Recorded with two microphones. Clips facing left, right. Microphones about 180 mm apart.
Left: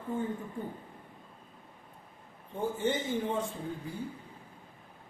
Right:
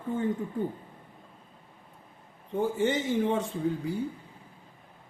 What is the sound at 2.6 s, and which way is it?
Speech, 75° right (ahead or behind).